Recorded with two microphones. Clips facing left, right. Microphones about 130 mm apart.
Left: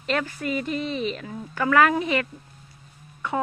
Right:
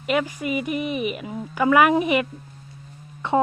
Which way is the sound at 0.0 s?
10° right (ahead or behind).